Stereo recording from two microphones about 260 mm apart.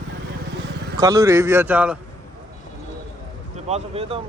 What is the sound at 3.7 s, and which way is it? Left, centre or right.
Speech, right.